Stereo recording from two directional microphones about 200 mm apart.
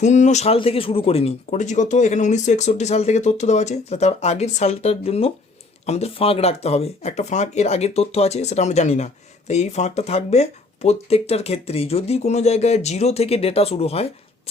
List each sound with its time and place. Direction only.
0.0 s speech: 35° left (ahead or behind)